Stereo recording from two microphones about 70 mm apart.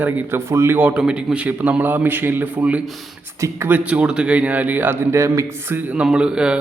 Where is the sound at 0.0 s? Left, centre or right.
Right.